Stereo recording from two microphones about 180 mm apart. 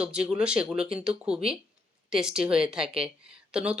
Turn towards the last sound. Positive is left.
turn(degrees=-5)  # may be behind; listen again after turning